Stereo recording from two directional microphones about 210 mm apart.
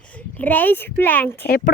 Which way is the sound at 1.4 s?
45° left (ahead or behind).